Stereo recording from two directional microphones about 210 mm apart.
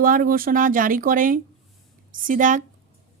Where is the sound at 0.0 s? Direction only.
40° right (ahead or behind).